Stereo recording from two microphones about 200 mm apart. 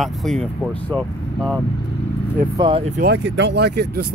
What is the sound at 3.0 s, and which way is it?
Speech, 55° right (ahead or behind).